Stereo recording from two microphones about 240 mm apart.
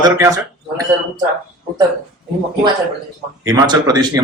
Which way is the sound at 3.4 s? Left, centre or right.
Centre.